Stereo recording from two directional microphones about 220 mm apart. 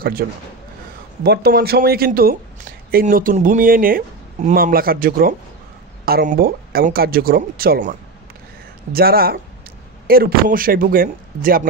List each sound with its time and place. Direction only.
0.2 s speech: 45° right (ahead or behind)
8.9 s speech: 45° right (ahead or behind)